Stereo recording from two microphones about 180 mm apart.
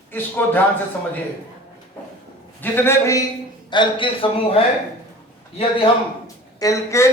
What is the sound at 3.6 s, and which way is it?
Speech, 25° left (ahead or behind).